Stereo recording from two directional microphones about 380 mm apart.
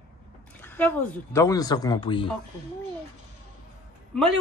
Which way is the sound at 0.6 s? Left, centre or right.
Centre.